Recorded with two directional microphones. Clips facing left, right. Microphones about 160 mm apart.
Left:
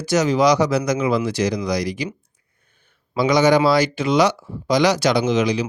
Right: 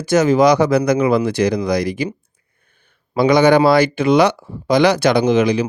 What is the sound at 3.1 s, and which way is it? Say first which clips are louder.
A man's voice: right 4 dB; 60° right (ahead or behind).